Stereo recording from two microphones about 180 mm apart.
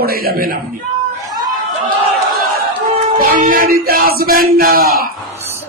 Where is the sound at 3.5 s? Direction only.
55° right (ahead or behind).